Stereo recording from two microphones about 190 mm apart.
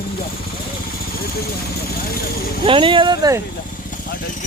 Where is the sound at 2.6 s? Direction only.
25° right (ahead or behind).